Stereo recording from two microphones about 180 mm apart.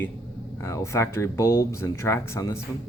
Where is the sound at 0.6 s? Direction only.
15° left (ahead or behind).